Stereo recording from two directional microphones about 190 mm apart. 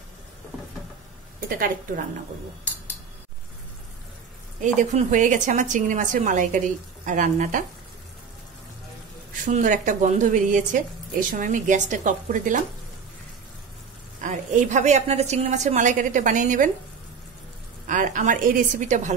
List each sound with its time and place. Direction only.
4.6 s speech: 40° right (ahead or behind)
9.5 s speech: 40° right (ahead or behind)
14.2 s a woman's voice: 40° right (ahead or behind)
17.8 s speech: 45° right (ahead or behind)